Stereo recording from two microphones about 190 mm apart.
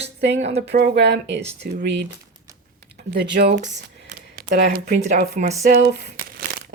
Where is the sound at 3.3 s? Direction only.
65° right (ahead or behind).